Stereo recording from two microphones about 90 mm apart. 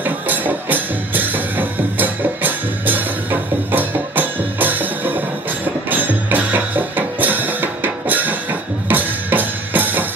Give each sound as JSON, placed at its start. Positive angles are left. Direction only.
{"t": 0.0, "sound": "music", "side_deg": -20}